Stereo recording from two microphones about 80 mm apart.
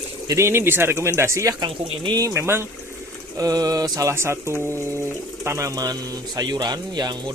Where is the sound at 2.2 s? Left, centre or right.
Right.